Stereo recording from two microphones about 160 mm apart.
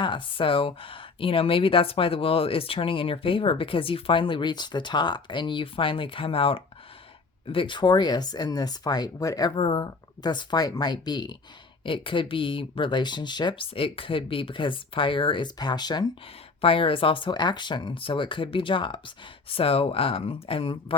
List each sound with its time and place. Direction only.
0.0 s speech: 30° left (ahead or behind)